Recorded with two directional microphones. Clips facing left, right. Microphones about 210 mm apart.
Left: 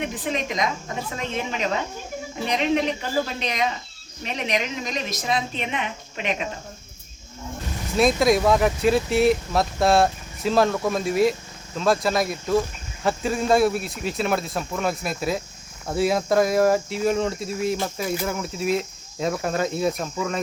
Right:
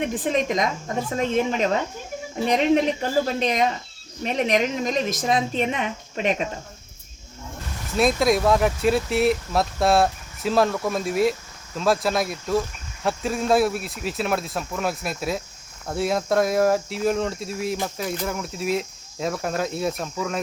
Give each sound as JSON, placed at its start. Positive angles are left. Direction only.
{"t": 0.0, "sound": "a woman's voice", "side_deg": -45}
{"t": 7.9, "sound": "speech", "side_deg": 0}